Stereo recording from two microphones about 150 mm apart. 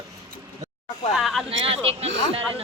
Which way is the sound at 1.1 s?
Centre (ahead or behind).